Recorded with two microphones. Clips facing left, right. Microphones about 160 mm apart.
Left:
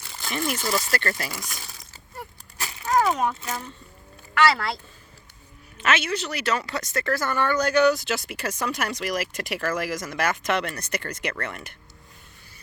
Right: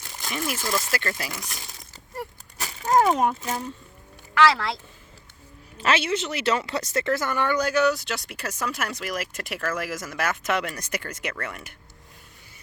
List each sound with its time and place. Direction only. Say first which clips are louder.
0.2 s speech: left 2 dB; 10° right (ahead or behind)
1.3 s speech: even; 10° left (ahead or behind)
2.8 s a sound: right 2 dB; 35° right (ahead or behind)
4.5 s speech: even; centre (ahead or behind)
5.7 s speech: right 1 dB; 30° right (ahead or behind); by 7.7 s 15° right (ahead or behind)
7.7 s speech: left 3 dB; centre (ahead or behind)